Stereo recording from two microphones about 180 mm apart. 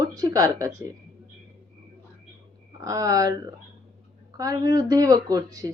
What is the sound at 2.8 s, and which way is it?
Speech, 20° right (ahead or behind).